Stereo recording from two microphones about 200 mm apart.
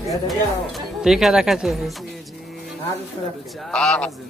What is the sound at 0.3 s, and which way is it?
Speech, centre (ahead or behind).